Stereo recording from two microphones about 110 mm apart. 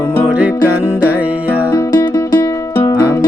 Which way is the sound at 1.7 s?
35° left (ahead or behind).